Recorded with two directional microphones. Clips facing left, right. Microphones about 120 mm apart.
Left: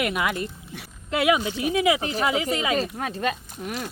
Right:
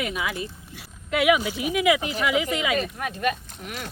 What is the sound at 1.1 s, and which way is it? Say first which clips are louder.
Speech: right 1 dB; 30° left (ahead or behind).